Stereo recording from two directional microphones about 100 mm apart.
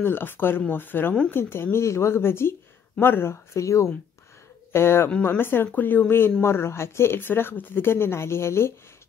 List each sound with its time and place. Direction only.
0.0 s speech: 20° left (ahead or behind)